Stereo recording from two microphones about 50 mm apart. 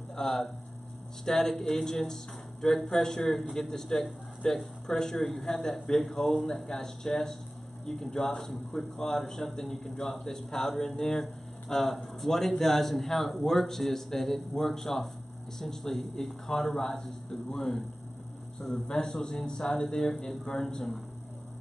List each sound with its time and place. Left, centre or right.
0.1 s hum: centre
1.2 s a man's voice: centre